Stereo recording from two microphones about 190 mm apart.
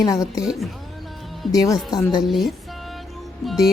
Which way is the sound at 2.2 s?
Centre (ahead or behind).